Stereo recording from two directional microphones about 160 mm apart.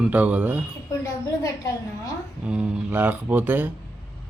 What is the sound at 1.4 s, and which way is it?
Speech, 20° left (ahead or behind).